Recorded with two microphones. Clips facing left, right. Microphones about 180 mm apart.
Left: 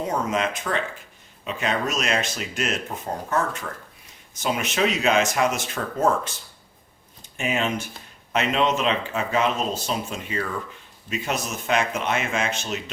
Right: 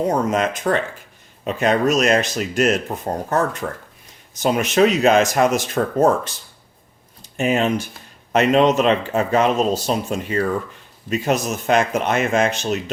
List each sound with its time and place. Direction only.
0.1 s speech: 40° right (ahead or behind)
7.3 s speech: 40° right (ahead or behind)